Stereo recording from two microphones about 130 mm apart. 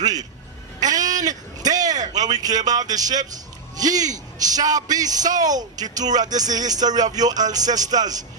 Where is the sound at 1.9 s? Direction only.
70° right (ahead or behind).